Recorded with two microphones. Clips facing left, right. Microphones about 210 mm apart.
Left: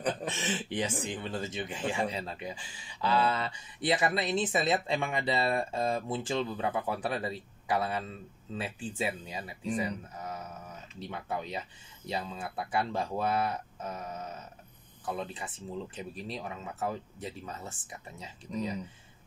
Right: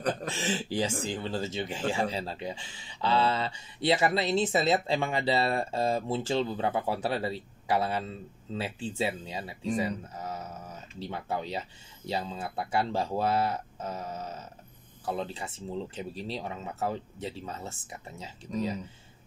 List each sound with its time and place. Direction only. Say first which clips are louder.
0.3 s speech: right 3 dB; 30° right (ahead or behind)